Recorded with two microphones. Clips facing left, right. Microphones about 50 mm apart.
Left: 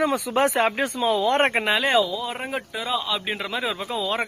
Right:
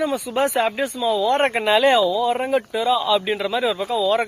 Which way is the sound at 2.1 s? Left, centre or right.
Centre.